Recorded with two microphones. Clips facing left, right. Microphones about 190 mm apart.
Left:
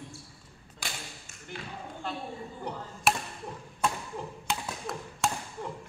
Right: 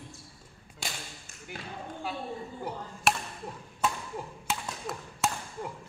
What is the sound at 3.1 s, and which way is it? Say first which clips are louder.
Chop: left 1 dB; centre (ahead or behind).